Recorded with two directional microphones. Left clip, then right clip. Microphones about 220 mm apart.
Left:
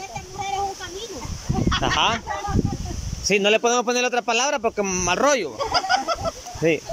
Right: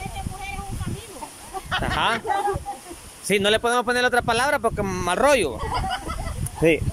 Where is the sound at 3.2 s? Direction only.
Centre (ahead or behind).